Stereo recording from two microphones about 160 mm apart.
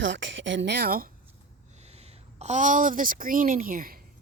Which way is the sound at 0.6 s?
90° right.